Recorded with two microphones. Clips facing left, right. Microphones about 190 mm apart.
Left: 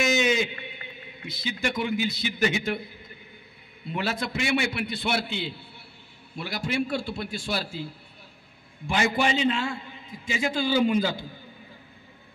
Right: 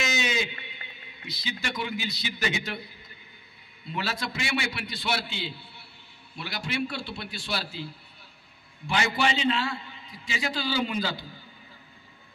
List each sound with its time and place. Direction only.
0.0 s a man's voice: 50° left (ahead or behind)
3.9 s a man's voice: 55° left (ahead or behind)